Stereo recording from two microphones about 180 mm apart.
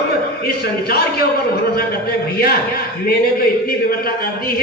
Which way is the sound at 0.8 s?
60° left (ahead or behind).